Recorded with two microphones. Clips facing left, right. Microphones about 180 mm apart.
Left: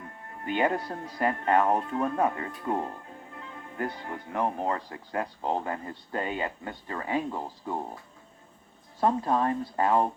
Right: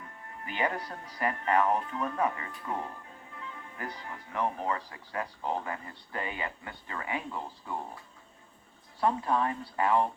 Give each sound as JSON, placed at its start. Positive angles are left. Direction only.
{"t": 0.5, "sound": "speech", "side_deg": 50}
{"t": 5.4, "sound": "speech", "side_deg": 30}
{"t": 5.6, "sound": "speech", "side_deg": 45}
{"t": 9.0, "sound": "speech", "side_deg": 40}